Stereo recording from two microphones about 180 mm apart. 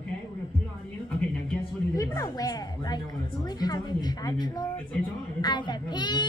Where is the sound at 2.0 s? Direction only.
20° left (ahead or behind).